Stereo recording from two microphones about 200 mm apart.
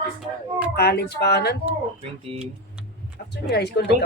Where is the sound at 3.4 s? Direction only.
55° left (ahead or behind).